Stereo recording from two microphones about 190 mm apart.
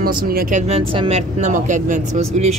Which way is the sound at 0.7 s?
30° right (ahead or behind).